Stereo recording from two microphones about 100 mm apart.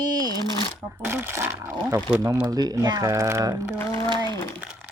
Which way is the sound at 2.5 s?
40° right (ahead or behind).